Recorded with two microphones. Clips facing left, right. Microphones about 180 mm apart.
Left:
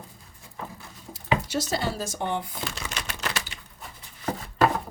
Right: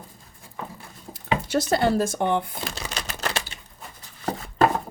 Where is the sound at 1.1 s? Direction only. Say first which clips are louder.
Right 3 dB; 55° right (ahead or behind).